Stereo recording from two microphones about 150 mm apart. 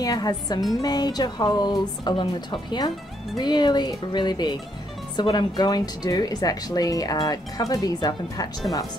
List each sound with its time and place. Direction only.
0.0 s speech: 25° left (ahead or behind)